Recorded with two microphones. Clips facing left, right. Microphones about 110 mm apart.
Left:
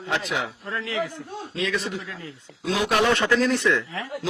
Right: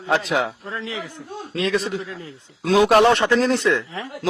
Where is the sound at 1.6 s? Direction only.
40° right (ahead or behind).